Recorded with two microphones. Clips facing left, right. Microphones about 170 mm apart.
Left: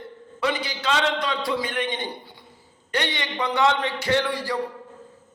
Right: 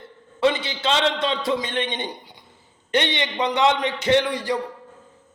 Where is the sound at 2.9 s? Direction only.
20° right (ahead or behind).